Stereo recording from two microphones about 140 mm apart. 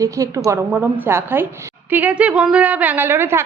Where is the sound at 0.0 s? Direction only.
25° right (ahead or behind).